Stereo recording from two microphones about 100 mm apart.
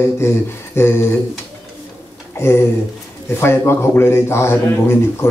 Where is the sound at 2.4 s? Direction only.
25° left (ahead or behind).